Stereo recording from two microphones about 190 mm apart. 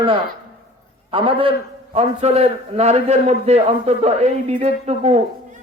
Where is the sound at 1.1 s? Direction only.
30° right (ahead or behind).